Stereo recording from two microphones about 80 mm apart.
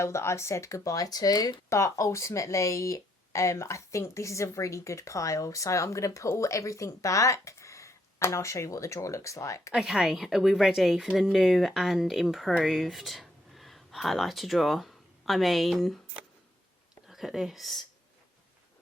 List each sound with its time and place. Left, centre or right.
0.0 s speech: left
1.7 s speech: left
9.7 s speech: centre
17.1 s speech: centre